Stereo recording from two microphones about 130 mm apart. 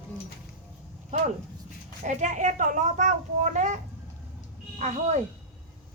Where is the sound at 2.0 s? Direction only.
70° right (ahead or behind).